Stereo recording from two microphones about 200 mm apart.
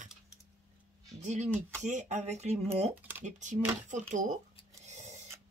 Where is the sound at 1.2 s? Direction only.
35° right (ahead or behind).